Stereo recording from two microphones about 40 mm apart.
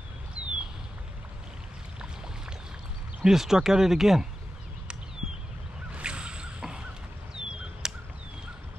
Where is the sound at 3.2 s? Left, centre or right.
Centre.